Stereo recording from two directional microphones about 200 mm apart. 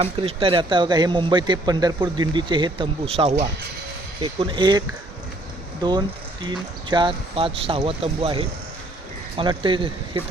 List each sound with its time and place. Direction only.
0.0 s speech: 30° right (ahead or behind)
5.8 s speech: 20° right (ahead or behind)